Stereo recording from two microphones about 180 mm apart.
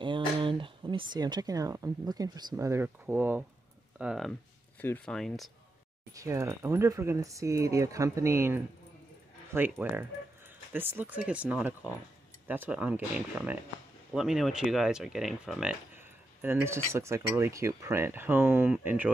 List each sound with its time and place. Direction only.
0.0 s speech: 25° right (ahead or behind); by 5.5 s centre (ahead or behind)
6.1 s speech: 15° right (ahead or behind)